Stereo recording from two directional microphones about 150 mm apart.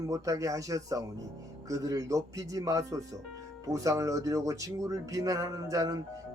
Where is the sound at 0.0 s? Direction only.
20° right (ahead or behind).